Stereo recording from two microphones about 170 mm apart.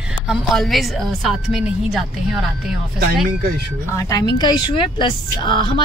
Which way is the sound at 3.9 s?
20° left (ahead or behind).